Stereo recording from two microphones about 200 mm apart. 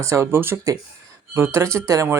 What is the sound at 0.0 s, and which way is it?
Speech, 15° right (ahead or behind).